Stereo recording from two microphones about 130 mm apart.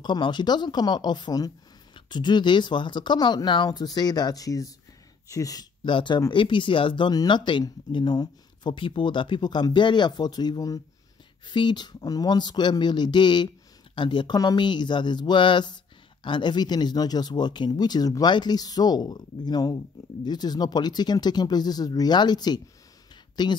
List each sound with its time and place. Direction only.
0.0 s speech: 35° left (ahead or behind)